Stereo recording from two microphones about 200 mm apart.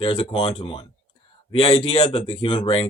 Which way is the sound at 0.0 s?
25° left (ahead or behind).